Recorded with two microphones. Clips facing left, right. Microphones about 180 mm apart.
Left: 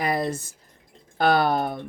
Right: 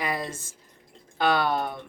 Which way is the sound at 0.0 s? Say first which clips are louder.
Left 6 dB; 40° left (ahead or behind).